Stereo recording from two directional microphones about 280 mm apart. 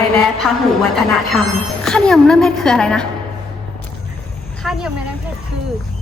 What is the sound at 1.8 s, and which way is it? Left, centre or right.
A woman's voice, centre.